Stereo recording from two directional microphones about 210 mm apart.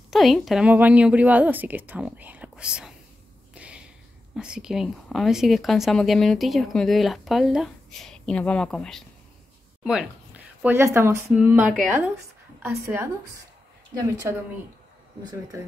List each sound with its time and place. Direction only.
0.1 s a woman's voice: centre (ahead or behind)
3.5 s a sound: 5° right (ahead or behind)
4.4 s a woman's voice: 5° right (ahead or behind)